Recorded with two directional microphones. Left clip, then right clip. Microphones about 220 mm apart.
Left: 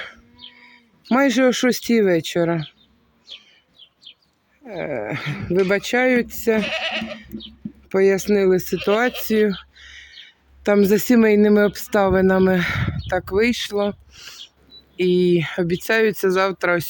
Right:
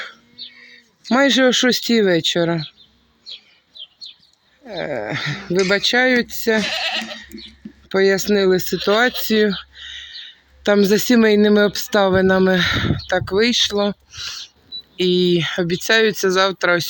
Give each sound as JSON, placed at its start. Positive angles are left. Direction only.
{"t": 0.0, "sound": "a sound", "side_deg": 5}
{"t": 4.6, "sound": "speech", "side_deg": 0}
{"t": 6.7, "sound": "goat", "side_deg": 45}
{"t": 7.9, "sound": "speech", "side_deg": 0}